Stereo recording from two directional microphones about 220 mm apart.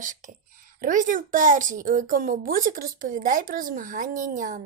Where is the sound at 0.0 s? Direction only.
35° right (ahead or behind).